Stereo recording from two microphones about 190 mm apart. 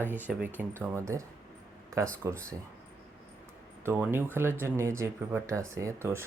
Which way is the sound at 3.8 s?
10° right (ahead or behind).